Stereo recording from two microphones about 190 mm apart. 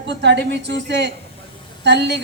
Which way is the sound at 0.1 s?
65° right (ahead or behind).